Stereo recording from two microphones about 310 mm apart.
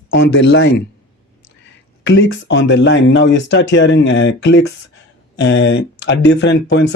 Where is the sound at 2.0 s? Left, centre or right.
Left.